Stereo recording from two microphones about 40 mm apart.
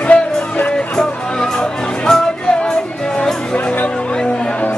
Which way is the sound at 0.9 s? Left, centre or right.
Centre.